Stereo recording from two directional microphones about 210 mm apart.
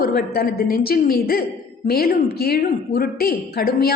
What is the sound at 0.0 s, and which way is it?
A woman's voice, 45° left (ahead or behind).